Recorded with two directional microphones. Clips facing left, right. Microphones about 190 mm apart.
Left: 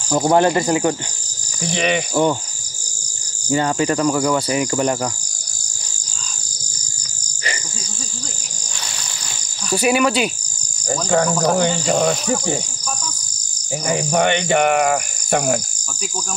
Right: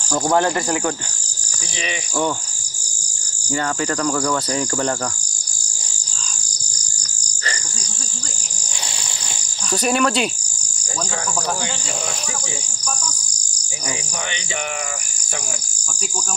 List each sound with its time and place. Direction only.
0.3 s cricket: 20° left (ahead or behind)
1.7 s cricket: 60° left (ahead or behind)
3.4 s cricket: 20° left (ahead or behind)
9.7 s cricket: 5° left (ahead or behind)
11.1 s cricket: 55° left (ahead or behind)
13.8 s cricket: 60° left (ahead or behind)